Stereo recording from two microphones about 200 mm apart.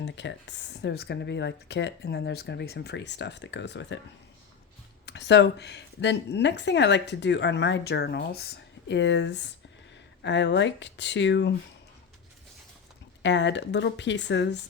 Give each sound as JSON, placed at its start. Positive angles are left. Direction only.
{"t": 0.0, "sound": "a woman's voice", "side_deg": 60}
{"t": 5.0, "sound": "a woman's voice", "side_deg": 60}
{"t": 13.2, "sound": "a woman's voice", "side_deg": 60}